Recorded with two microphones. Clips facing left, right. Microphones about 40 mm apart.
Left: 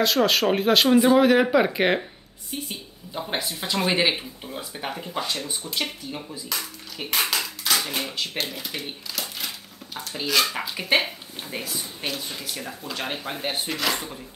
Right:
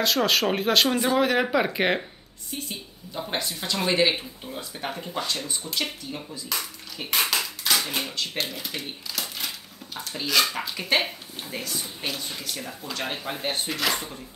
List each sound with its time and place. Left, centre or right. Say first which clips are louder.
0.0 s speech: left 2 dB; centre
2.5 s speech: left 1 dB; centre
6.5 s speech: even; centre
7.7 s a sound: even; centre
8.4 s speech: left 1 dB; centre